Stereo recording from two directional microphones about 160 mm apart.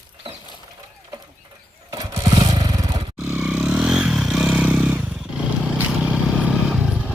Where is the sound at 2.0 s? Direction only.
25° right (ahead or behind).